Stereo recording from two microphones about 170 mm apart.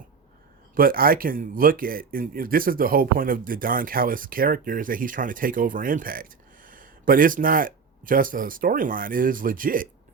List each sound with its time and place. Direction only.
0.8 s speech: 60° right (ahead or behind)